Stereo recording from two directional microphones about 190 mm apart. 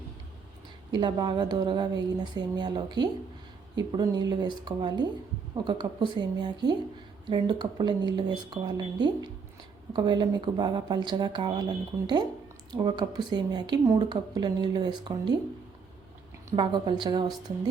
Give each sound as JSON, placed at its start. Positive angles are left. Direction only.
{"t": 0.9, "sound": "a woman's voice", "side_deg": -25}
{"t": 16.5, "sound": "a woman's voice", "side_deg": -25}